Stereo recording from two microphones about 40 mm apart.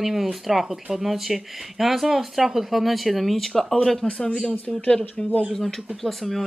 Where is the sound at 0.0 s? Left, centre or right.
Centre.